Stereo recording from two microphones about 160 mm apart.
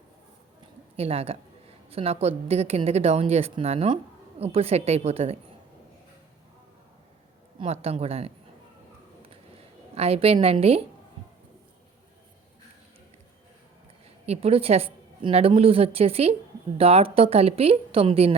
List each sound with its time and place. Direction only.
0.9 s a woman's voice: 40° right (ahead or behind)
7.6 s speech: 40° right (ahead or behind)
9.9 s speech: 40° right (ahead or behind)
14.3 s speech: 40° right (ahead or behind)